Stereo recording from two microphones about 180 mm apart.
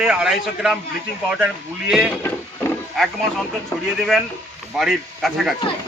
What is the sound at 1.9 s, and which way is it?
Speech, centre (ahead or behind).